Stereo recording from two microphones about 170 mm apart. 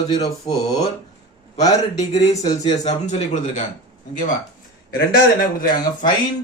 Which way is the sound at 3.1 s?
40° left (ahead or behind).